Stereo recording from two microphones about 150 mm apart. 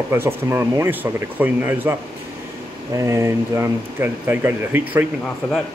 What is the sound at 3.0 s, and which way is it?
Speech, 20° right (ahead or behind).